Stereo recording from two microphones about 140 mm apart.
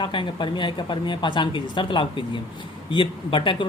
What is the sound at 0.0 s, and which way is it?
Speech, 35° left (ahead or behind).